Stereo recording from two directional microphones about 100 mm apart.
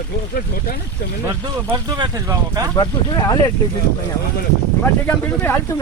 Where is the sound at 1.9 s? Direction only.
40° right (ahead or behind).